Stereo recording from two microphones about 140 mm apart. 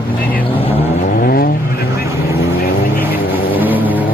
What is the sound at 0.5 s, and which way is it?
Vehicle, 40° left (ahead or behind).